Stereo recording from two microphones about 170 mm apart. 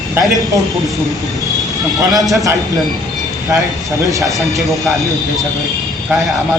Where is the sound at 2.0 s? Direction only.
20° right (ahead or behind).